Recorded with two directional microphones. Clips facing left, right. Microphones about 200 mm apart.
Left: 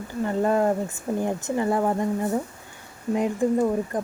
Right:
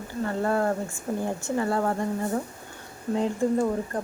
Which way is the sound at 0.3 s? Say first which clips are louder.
Left 4 dB; 15° left (ahead or behind).